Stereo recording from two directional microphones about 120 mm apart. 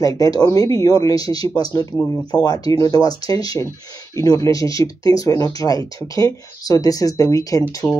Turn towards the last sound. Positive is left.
turn(degrees=30)  # may be behind; listen again after turning